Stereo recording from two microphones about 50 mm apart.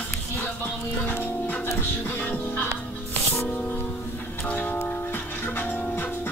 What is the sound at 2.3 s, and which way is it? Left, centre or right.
Music, left.